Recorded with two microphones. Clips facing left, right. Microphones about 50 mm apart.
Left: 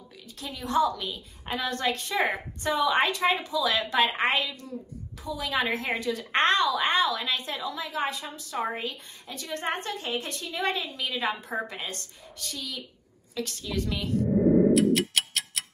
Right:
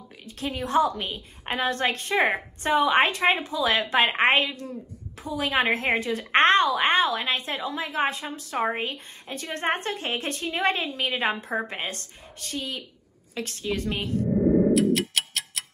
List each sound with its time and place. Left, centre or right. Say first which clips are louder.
0.2 s a woman's voice: right 7 dB; right
14.7 s tick-tock: even; centre